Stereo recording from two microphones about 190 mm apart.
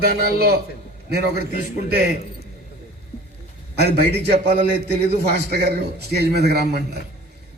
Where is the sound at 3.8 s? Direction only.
60° right (ahead or behind).